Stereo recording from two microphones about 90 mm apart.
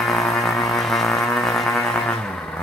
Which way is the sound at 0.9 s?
Centre (ahead or behind).